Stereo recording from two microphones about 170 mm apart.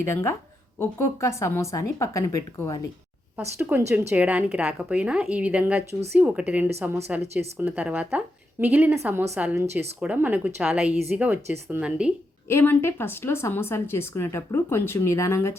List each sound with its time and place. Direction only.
0.0 s speech: 15° left (ahead or behind)
3.3 s a woman's voice: 10° right (ahead or behind)
12.5 s speech: 15° left (ahead or behind)